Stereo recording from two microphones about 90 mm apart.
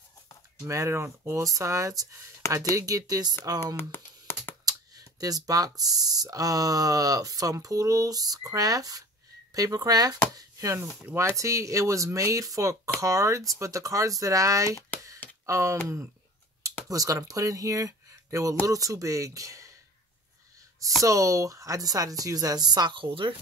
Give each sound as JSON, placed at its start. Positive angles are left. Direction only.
{"t": 0.7, "sound": "speech", "side_deg": -30}
{"t": 3.5, "sound": "computer keyboard", "side_deg": 25}
{"t": 4.6, "sound": "speech", "side_deg": -45}
{"t": 16.9, "sound": "speech", "side_deg": -40}
{"t": 21.0, "sound": "speech", "side_deg": -40}